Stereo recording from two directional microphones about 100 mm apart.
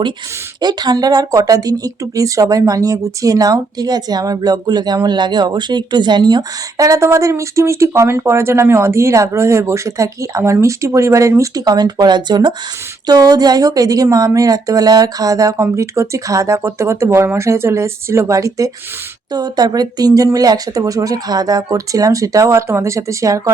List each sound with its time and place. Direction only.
0.6 s speech: 45° right (ahead or behind)